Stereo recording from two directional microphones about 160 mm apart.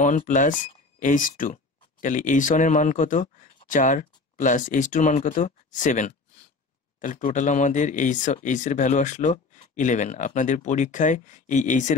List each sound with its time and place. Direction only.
0.0 s speech: 55° left (ahead or behind)